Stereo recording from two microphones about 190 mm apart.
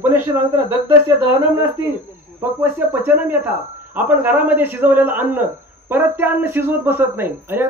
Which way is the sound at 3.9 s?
10° right (ahead or behind).